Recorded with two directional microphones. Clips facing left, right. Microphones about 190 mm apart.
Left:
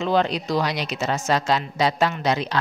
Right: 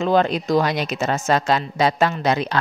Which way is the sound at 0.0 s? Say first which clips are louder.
Right 3 dB; 50° right (ahead or behind).